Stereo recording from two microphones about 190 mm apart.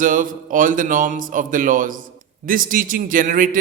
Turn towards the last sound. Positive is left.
turn(degrees=-45)  # may be behind; listen again after turning